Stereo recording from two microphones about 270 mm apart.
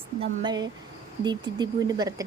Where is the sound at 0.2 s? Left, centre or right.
Centre.